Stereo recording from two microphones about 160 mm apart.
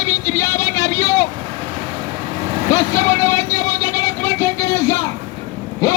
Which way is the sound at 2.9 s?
20° left (ahead or behind).